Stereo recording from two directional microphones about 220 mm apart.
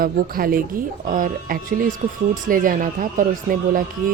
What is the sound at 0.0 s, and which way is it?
Speech, 40° right (ahead or behind).